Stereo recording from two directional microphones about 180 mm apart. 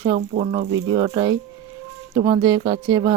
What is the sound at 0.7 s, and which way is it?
Speech, 20° right (ahead or behind).